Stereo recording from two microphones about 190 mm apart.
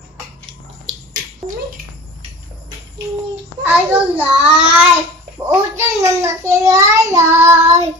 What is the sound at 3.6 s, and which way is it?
A child's voice, 5° right (ahead or behind).